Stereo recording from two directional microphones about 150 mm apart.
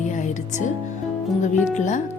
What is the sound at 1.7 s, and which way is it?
Speech, 55° left (ahead or behind).